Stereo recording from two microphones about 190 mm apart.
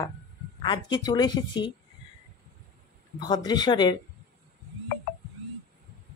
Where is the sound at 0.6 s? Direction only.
20° left (ahead or behind).